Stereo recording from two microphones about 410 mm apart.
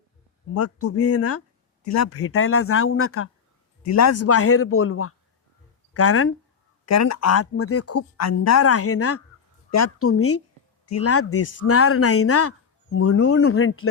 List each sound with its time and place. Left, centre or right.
0.5 s speech: left